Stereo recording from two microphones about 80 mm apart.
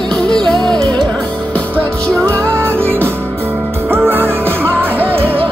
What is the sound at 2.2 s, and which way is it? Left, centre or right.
Music, right.